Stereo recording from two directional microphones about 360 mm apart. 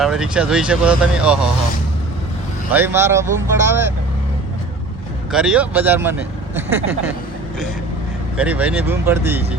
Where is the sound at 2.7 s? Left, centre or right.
Centre.